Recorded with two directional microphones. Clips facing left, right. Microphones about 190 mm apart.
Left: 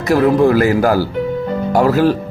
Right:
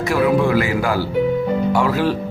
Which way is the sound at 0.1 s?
40° left (ahead or behind).